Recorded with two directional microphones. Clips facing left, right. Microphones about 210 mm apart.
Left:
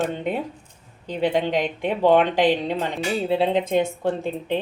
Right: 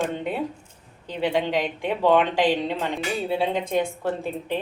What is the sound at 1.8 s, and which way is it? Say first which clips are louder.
A woman's voice: left 2 dB; 15° left (ahead or behind).